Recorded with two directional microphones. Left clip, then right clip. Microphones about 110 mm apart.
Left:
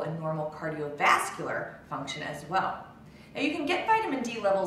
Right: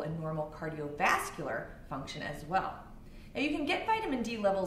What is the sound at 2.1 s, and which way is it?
A woman's voice, 45° right (ahead or behind).